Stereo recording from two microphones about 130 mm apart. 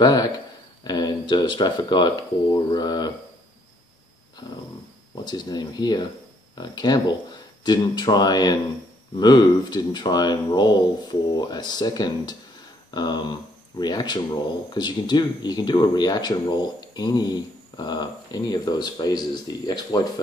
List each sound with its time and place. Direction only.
0.0 s speech: 30° left (ahead or behind)
5.1 s speech: 35° left (ahead or behind)